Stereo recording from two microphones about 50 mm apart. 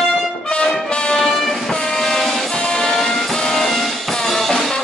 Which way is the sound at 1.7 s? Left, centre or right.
Centre.